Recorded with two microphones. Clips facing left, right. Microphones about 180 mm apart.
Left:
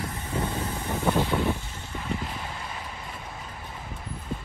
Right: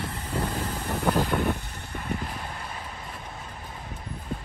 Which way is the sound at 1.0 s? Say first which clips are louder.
Even; 5° right (ahead or behind).